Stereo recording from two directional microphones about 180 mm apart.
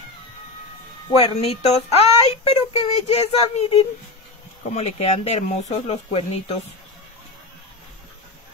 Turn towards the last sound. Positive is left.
turn(degrees=35)  # may be behind; listen again after turning